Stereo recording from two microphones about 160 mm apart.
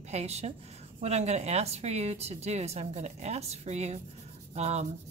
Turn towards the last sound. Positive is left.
turn(degrees=-45)  # may be behind; listen again after turning